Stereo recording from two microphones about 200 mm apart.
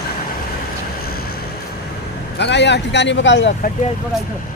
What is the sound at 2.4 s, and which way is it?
Speech, 60° left (ahead or behind).